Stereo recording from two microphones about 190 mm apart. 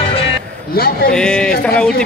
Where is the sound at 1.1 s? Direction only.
5° left (ahead or behind).